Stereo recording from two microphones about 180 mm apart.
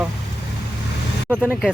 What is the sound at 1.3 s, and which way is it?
Speech, 10° right (ahead or behind).